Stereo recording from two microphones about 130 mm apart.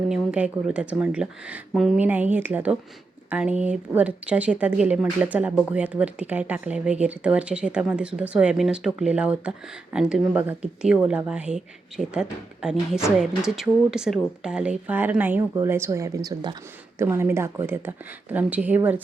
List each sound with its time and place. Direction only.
0.1 s a woman's voice: 10° right (ahead or behind); by 16.6 s 30° right (ahead or behind)
17.0 s a woman's voice: 20° right (ahead or behind)